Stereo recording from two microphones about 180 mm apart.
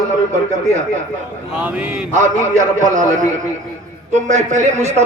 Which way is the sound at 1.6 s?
10° right (ahead or behind).